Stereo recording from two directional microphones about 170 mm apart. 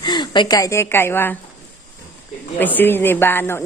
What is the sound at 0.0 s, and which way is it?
A woman's voice, 25° left (ahead or behind).